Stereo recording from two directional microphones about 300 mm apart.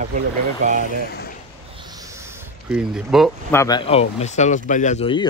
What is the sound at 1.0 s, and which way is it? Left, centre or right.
Speech, left.